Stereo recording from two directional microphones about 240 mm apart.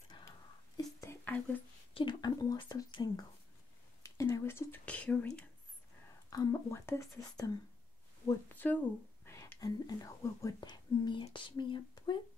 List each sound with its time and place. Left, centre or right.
0.1 s whispering: centre
2.0 s speech: centre
8.5 s speech: centre